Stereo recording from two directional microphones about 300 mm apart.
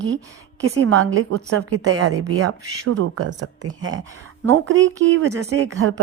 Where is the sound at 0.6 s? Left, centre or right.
Right.